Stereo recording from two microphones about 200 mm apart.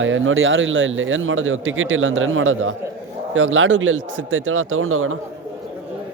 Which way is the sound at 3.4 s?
80° right.